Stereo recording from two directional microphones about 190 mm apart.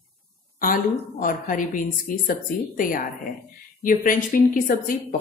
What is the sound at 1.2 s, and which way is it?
Speech, 45° left (ahead or behind).